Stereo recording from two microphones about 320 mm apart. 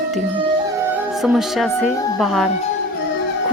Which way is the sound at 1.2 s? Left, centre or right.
Centre.